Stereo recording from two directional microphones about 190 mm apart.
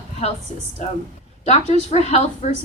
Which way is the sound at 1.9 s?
35° left (ahead or behind).